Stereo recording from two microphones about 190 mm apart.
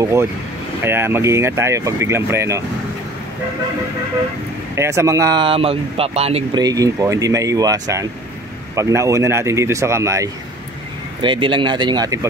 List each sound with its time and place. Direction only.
0.0 s speech: 15° right (ahead or behind)
4.7 s speech: 15° right (ahead or behind); by 6.6 s 30° right (ahead or behind)
6.6 s speech: 20° right (ahead or behind)
11.2 s speech: 25° right (ahead or behind)